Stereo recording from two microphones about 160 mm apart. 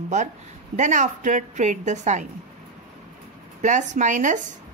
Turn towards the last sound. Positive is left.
turn(degrees=-50)  # may be behind; listen again after turning